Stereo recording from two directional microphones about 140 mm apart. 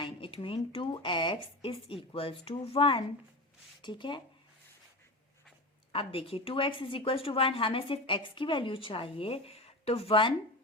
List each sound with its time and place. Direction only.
0.0 s a woman's voice: 40° left (ahead or behind)
5.9 s a woman's voice: 40° left (ahead or behind)